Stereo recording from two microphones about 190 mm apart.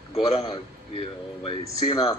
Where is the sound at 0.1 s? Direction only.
30° left (ahead or behind).